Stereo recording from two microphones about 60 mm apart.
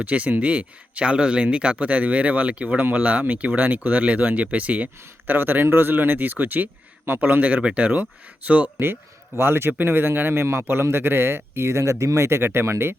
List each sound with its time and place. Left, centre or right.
0.0 s a man's voice: right
8.8 s a man's voice: right